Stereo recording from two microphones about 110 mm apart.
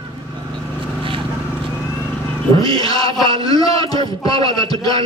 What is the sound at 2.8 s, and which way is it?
A man's voice, 35° left (ahead or behind).